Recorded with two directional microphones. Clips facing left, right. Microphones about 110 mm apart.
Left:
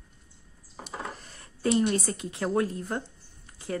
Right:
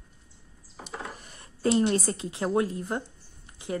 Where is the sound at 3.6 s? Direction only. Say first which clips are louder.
Right 1 dB; 20° right (ahead or behind).